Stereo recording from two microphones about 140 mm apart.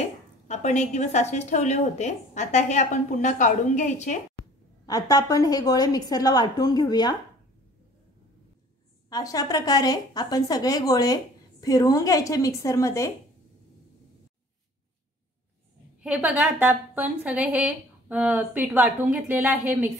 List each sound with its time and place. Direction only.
0.5 s speech: 55° left (ahead or behind)
4.8 s a woman's voice: 25° left (ahead or behind)
9.1 s a woman's voice: 25° left (ahead or behind)
16.0 s a woman's voice: 10° right (ahead or behind)